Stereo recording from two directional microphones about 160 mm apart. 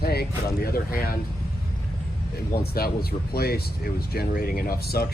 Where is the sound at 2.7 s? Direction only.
75° left (ahead or behind).